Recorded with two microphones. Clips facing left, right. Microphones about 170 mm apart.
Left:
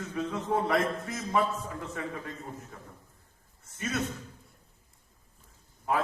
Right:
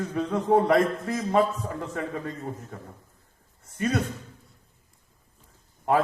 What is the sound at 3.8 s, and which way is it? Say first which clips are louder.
Speech: right 7 dB; 60° right (ahead or behind).